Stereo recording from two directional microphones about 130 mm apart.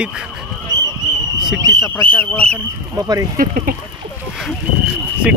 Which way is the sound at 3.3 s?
90° right.